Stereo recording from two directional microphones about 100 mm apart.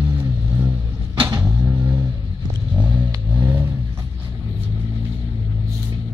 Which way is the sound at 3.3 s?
20° right (ahead or behind).